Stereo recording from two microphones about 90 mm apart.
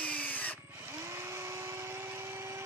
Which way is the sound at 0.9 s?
30° right (ahead or behind).